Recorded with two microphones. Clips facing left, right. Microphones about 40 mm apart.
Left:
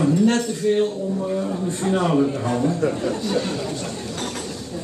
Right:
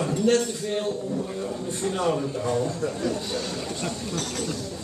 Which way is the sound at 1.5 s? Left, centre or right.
Left.